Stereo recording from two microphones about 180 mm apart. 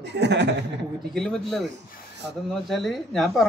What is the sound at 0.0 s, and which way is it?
Speech, 70° right (ahead or behind).